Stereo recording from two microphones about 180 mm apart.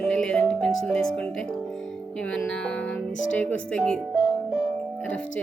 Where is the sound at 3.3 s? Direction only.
10° left (ahead or behind).